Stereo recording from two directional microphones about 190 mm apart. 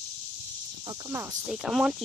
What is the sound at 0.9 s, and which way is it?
Cricket, 15° right (ahead or behind).